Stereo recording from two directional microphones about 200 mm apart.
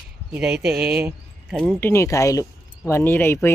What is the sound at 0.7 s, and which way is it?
Speech, 50° right (ahead or behind).